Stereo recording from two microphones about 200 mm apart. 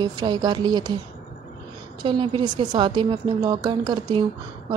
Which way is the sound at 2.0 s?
25° right (ahead or behind).